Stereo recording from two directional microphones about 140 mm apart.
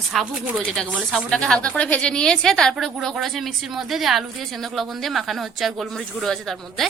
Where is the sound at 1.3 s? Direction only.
5° left (ahead or behind).